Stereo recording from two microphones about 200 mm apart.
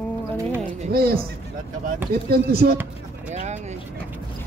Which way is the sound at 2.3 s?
50° right (ahead or behind).